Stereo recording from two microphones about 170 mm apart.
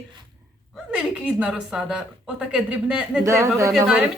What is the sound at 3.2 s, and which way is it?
Speech, 15° right (ahead or behind).